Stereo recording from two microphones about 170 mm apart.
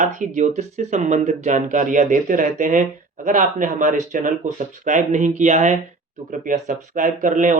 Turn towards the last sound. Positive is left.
turn(degrees=-50)  # may be behind; listen again after turning